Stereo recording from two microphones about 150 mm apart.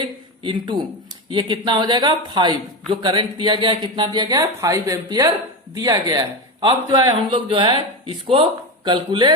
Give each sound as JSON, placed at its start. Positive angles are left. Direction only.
{"t": 0.4, "sound": "a man's voice", "side_deg": -30}